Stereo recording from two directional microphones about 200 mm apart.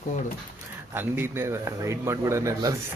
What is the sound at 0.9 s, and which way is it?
A man's voice, 10° right (ahead or behind).